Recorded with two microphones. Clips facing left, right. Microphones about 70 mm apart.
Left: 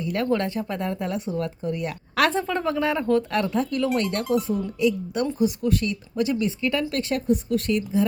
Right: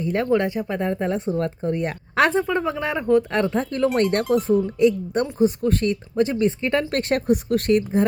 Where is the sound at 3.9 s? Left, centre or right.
Right.